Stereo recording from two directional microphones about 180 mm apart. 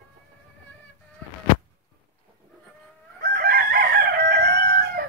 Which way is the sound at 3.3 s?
55° right (ahead or behind).